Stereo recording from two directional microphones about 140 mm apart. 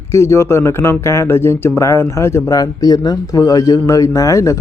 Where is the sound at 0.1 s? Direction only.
20° left (ahead or behind).